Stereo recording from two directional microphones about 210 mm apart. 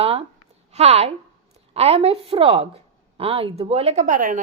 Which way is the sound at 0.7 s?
30° right (ahead or behind).